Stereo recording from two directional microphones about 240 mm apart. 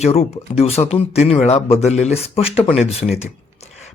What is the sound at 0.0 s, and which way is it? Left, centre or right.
Speech, left.